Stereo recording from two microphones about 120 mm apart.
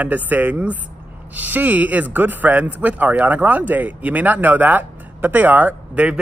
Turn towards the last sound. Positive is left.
turn(degrees=-10)  # may be behind; listen again after turning